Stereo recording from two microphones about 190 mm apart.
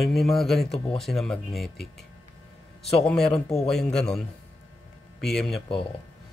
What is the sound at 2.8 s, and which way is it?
Speech, centre (ahead or behind).